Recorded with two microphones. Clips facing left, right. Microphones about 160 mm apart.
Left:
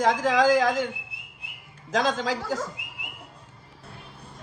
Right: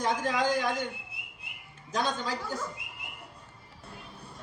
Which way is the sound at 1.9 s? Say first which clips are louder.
Left 6 dB; 90° left.